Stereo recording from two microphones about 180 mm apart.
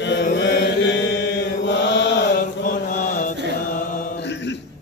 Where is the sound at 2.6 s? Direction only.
45° left (ahead or behind).